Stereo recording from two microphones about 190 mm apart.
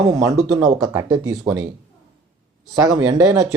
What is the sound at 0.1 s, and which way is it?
Speech, 20° right (ahead or behind).